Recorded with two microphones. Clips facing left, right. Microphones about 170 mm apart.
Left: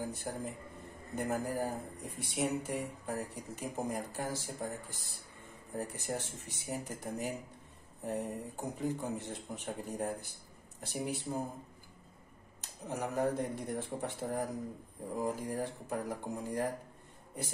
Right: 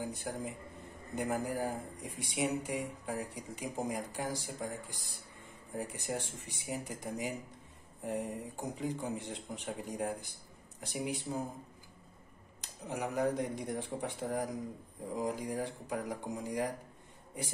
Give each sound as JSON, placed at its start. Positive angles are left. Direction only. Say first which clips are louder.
{"t": 0.0, "sound": "speech", "louder": "even", "side_deg": -15}
{"t": 12.8, "sound": "speech", "louder": "even", "side_deg": -15}